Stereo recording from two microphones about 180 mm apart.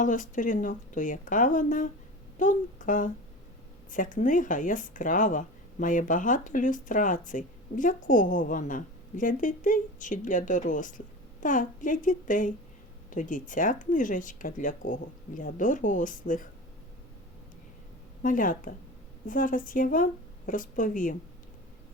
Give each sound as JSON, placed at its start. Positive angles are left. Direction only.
{"t": 0.0, "sound": "speech", "side_deg": 45}
{"t": 18.2, "sound": "speech", "side_deg": 50}